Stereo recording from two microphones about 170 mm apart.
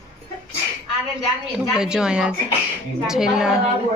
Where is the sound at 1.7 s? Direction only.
5° right (ahead or behind).